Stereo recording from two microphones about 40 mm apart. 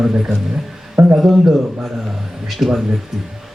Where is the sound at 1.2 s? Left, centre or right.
Centre.